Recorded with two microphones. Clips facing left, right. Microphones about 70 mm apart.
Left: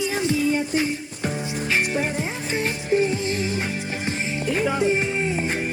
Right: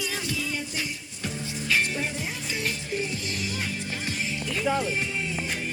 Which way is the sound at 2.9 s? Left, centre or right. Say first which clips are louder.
Left 10 dB; left.